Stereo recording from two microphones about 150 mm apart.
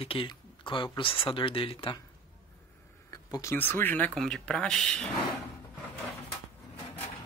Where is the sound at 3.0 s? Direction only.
25° left (ahead or behind); by 5.1 s 5° left (ahead or behind).